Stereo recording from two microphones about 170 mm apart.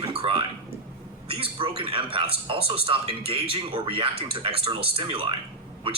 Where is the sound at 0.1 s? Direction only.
30° right (ahead or behind).